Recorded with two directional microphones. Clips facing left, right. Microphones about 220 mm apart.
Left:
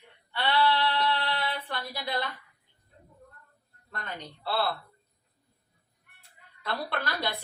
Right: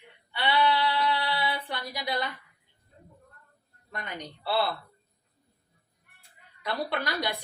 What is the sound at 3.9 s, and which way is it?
Speech, 15° right (ahead or behind).